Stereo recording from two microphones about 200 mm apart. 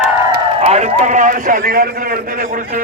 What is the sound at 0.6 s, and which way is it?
A man's voice, 35° right (ahead or behind).